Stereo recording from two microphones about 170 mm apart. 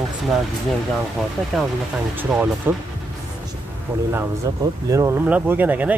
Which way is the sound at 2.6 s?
15° right (ahead or behind).